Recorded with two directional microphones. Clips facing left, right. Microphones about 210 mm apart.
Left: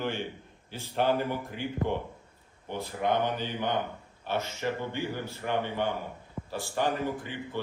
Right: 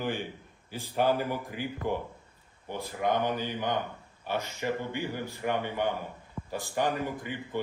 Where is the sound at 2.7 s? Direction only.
10° right (ahead or behind).